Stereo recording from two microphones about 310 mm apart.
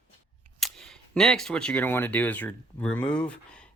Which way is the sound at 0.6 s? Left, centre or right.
Centre.